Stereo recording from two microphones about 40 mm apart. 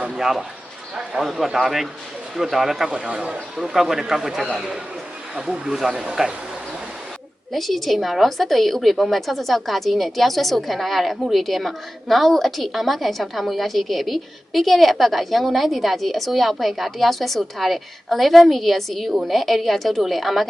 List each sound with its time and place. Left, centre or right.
0.2 s a man's voice: centre
2.9 s a man's voice: right
3.6 s a man's voice: centre
7.5 s a woman's voice: centre